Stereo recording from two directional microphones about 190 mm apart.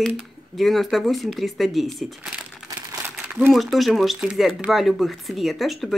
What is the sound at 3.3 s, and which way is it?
A woman's voice, 5° right (ahead or behind).